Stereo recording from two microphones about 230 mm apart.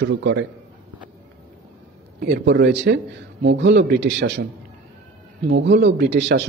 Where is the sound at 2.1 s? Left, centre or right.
Right.